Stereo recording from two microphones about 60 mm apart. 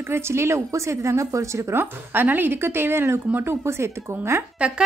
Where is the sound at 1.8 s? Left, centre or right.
Right.